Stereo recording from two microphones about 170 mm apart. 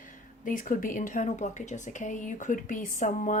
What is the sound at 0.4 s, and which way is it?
Speech, 50° left (ahead or behind).